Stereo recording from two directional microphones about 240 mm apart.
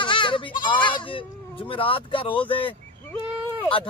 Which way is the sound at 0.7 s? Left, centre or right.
Left.